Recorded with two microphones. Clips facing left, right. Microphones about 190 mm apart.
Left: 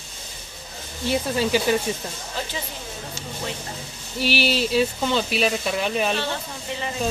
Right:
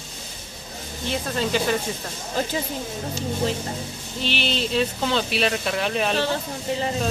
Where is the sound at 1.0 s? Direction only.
10° left (ahead or behind).